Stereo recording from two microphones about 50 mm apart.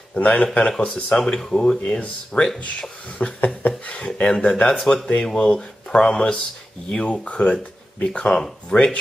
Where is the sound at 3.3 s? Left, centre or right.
Left.